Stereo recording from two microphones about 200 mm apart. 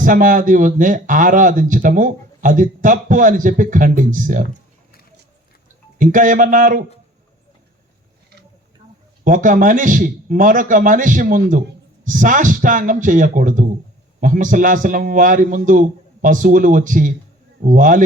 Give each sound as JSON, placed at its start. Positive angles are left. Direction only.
{"t": 0.0, "sound": "speech", "side_deg": -40}
{"t": 6.0, "sound": "speech", "side_deg": -40}
{"t": 9.2, "sound": "speech", "side_deg": -40}